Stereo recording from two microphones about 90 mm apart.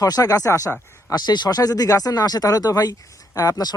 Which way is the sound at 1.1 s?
50° left (ahead or behind).